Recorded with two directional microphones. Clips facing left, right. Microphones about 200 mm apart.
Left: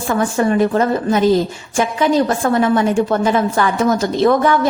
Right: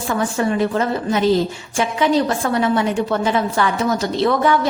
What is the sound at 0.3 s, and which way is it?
A woman's voice, 45° left (ahead or behind).